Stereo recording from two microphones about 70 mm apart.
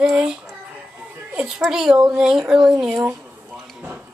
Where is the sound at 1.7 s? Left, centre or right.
Centre.